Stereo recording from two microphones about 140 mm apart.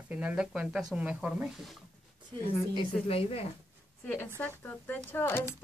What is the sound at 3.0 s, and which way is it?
Speech, 45° left (ahead or behind).